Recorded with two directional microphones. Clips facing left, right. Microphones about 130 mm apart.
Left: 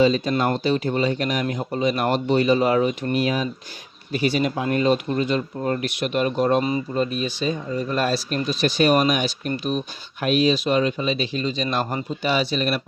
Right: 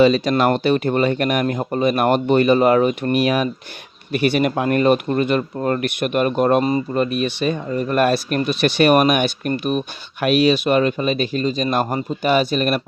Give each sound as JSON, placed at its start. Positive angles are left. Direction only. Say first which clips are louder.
{"t": 0.0, "sound": "speech", "louder": "right 4 dB", "side_deg": -75}
{"t": 6.9, "sound": "speech", "louder": "right 4 dB", "side_deg": -65}